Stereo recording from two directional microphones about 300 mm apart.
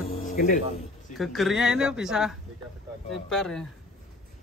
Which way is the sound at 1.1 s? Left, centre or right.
Centre.